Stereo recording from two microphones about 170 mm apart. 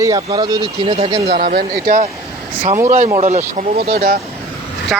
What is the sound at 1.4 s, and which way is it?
Speech, 65° right (ahead or behind).